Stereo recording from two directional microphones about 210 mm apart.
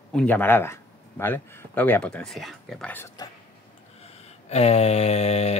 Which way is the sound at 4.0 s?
30° left (ahead or behind).